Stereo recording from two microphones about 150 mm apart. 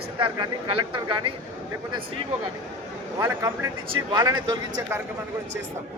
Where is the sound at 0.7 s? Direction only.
30° right (ahead or behind).